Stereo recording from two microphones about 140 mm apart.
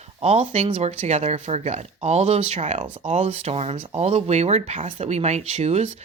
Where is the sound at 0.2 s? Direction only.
50° right (ahead or behind).